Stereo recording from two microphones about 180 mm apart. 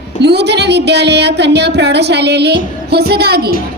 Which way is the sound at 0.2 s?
70° right (ahead or behind).